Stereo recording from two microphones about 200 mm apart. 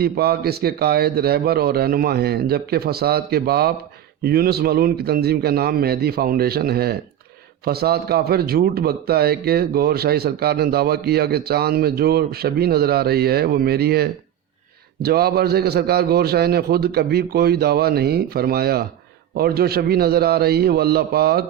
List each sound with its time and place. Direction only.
0.0 s a man's voice: 50° right (ahead or behind)